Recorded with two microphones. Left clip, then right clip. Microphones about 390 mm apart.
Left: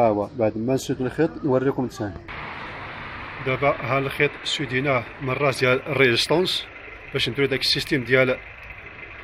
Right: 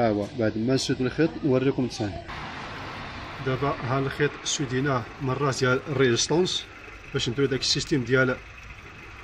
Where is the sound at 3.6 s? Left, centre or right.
Centre.